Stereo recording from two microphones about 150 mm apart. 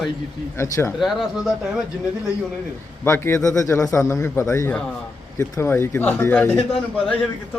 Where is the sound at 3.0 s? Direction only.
15° left (ahead or behind).